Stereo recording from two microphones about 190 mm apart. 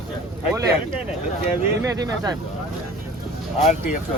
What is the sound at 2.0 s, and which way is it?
Speech, 20° right (ahead or behind).